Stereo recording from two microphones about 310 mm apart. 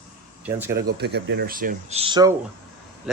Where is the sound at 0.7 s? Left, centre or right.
Right; by 2.3 s centre.